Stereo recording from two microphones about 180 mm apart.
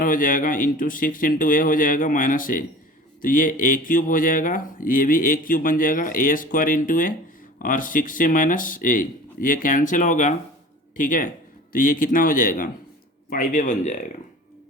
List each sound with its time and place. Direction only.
0.0 s speech: 50° left (ahead or behind)